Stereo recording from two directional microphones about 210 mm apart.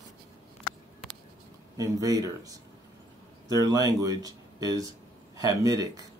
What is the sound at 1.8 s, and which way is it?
Speech, 15° right (ahead or behind).